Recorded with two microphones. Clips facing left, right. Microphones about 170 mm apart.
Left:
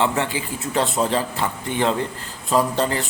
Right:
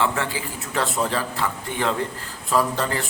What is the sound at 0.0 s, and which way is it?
A man's voice, 20° left (ahead or behind).